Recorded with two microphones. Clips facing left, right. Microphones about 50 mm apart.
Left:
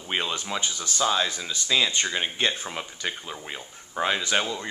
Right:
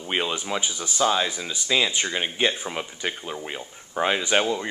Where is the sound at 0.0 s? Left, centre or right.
Centre.